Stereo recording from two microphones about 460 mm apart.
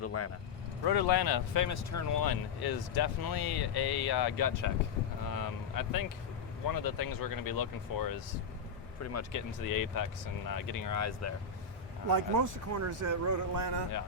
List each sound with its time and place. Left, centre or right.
0.0 s speech: left
0.9 s speech: left
5.2 s a sound: left
6.7 s speech: left
12.0 s speech: right